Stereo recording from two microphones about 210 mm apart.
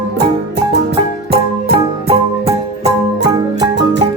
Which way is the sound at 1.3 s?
30° right (ahead or behind).